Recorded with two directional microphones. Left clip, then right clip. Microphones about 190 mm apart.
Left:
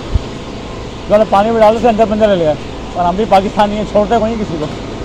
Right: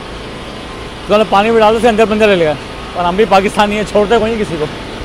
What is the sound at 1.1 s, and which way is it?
Speech, 90° right.